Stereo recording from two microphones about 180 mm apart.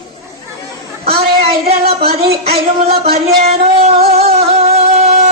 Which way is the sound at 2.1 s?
35° right (ahead or behind).